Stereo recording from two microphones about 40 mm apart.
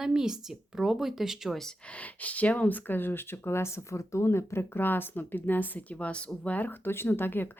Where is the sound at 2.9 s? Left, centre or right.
Left.